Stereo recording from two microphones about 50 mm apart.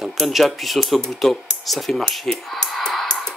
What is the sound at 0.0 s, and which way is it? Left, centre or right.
Speech, centre.